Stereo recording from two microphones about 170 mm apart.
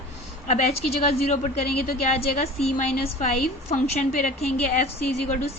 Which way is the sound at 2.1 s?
40° left (ahead or behind).